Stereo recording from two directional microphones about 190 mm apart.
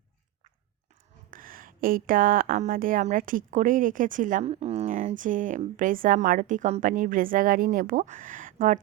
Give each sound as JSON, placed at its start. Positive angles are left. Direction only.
{"t": 1.3, "sound": "a woman's voice", "side_deg": -45}